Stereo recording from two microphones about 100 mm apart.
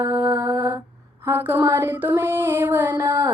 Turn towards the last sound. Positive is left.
turn(degrees=-20)  # may be behind; listen again after turning